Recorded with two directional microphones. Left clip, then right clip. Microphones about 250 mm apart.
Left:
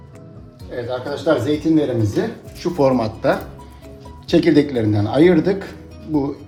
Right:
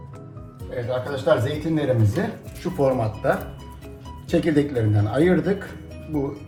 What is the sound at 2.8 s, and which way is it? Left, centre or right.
Speech, left.